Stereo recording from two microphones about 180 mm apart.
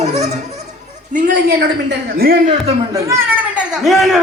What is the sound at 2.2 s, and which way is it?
Speech, 55° right (ahead or behind).